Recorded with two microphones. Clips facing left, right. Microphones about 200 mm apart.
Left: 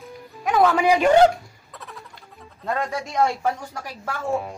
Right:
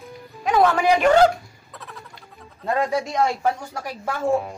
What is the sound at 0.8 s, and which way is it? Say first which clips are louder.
Speech: left 2 dB; 15° left (ahead or behind).